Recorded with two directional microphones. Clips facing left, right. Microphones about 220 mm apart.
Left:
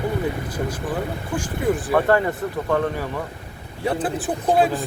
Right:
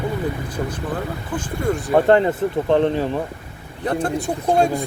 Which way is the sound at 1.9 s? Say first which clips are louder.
Right 6 dB; 25° right (ahead or behind).